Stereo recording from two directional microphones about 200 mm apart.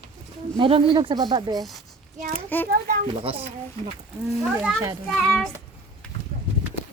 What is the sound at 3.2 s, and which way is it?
Speech, 30° right (ahead or behind).